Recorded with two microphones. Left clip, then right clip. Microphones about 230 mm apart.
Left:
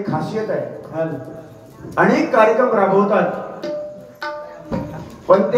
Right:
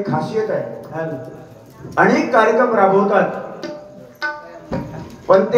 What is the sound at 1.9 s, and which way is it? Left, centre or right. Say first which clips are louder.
Speech: right 1 dB; right.